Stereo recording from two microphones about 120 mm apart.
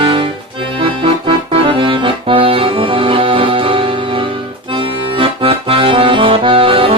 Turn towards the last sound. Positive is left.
turn(degrees=-50)  # may be behind; listen again after turning